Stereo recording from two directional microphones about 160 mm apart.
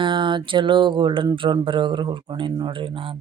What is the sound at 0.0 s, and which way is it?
Music, 30° right (ahead or behind).